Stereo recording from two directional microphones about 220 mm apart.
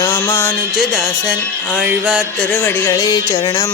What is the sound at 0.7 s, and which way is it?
Music, centre (ahead or behind).